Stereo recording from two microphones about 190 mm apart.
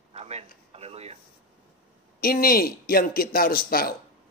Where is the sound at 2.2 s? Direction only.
50° left (ahead or behind).